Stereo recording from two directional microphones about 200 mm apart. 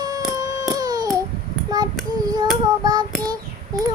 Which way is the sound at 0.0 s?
20° right (ahead or behind).